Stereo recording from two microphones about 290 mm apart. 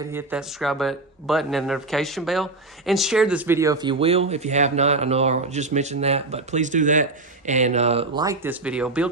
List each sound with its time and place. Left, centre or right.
0.1 s speech: centre